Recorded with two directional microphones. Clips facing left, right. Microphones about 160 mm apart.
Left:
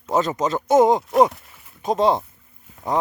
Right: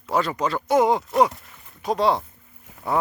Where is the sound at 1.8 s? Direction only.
20° left (ahead or behind).